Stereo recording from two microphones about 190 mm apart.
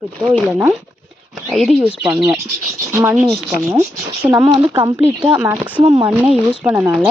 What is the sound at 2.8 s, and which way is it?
Speech, 15° right (ahead or behind).